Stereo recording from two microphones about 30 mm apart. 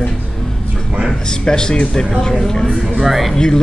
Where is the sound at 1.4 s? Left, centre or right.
Left.